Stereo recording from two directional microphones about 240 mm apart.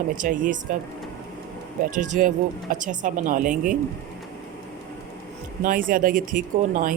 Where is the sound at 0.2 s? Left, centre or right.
Right.